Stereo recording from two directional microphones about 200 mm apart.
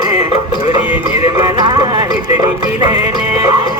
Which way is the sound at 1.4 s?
20° right (ahead or behind).